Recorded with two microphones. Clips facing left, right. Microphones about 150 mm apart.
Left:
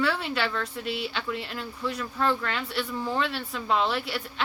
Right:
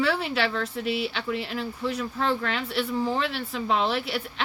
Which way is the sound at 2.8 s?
30° right (ahead or behind).